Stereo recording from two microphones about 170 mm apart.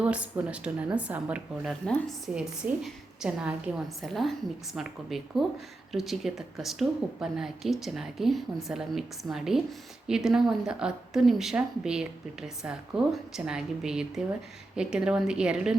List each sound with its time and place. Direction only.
0.0 s a woman's voice: 10° right (ahead or behind)
1.9 s a woman's voice: 5° left (ahead or behind)